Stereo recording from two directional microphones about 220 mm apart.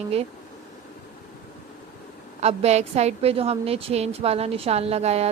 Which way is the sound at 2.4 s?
30° right (ahead or behind).